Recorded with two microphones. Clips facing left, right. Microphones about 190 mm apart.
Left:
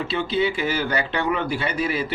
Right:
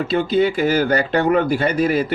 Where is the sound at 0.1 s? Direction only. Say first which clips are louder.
Right 6 dB; 45° right (ahead or behind).